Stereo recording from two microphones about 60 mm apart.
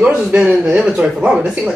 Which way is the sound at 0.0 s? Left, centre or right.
Centre.